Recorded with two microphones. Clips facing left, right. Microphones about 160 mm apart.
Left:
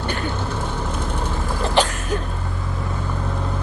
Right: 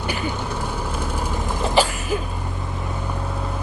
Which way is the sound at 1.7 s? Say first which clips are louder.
Right 1 dB; 5° right (ahead or behind).